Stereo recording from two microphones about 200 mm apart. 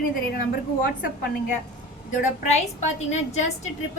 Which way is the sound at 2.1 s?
40° left (ahead or behind).